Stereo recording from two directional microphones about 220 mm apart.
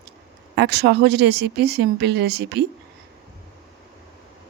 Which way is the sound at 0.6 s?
50° right (ahead or behind).